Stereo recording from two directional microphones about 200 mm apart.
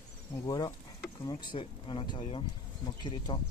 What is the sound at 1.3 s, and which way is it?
Speech, 25° left (ahead or behind).